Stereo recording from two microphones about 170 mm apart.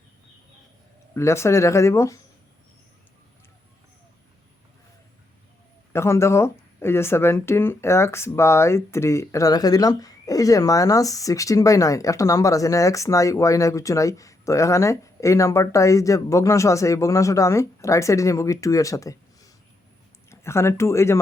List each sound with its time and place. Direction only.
1.1 s speech: 15° left (ahead or behind)
5.9 s speech: 15° left (ahead or behind)